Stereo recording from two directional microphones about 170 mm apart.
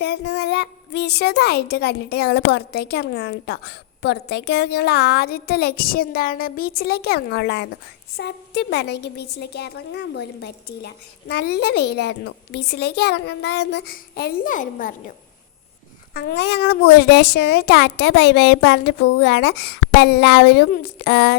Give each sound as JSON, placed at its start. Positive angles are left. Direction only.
{"t": 0.0, "sound": "a woman's voice", "side_deg": 90}
{"t": 16.1, "sound": "a woman's voice", "side_deg": 75}